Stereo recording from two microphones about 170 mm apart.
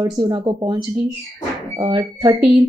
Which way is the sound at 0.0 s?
30° right (ahead or behind).